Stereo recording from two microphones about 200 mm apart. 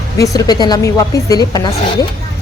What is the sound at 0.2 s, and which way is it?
A woman's voice, 20° left (ahead or behind).